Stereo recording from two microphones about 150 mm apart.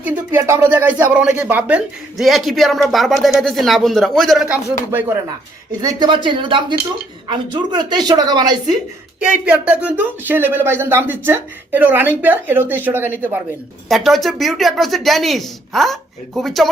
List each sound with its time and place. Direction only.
0.0 s speech: 15° right (ahead or behind)
5.8 s a woman's voice: 25° right (ahead or behind)
9.2 s speech: 10° right (ahead or behind)
13.8 s speech: centre (ahead or behind)